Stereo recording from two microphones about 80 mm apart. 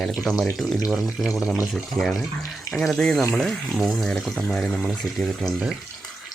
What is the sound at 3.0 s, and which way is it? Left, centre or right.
Speech, centre.